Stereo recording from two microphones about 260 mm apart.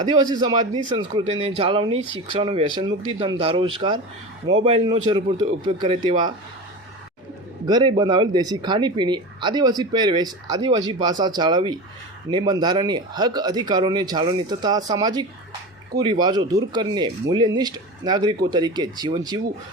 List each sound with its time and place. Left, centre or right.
0.3 s speech: centre
7.7 s speech: centre